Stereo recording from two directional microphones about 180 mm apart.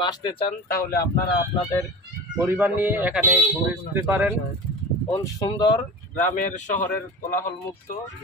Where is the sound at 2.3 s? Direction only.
10° right (ahead or behind).